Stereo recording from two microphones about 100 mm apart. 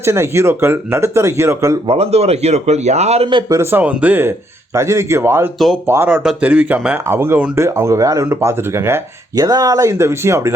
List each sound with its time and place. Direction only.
0.0 s speech: 25° right (ahead or behind)
1.9 s a man's voice: 85° right
3.5 s speech: 25° right (ahead or behind)
6.1 s speech: 10° right (ahead or behind)
7.1 s speech: 25° right (ahead or behind)
9.3 s speech: 35° right (ahead or behind)